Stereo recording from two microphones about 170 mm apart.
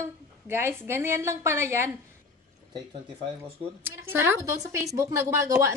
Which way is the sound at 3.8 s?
10° right (ahead or behind).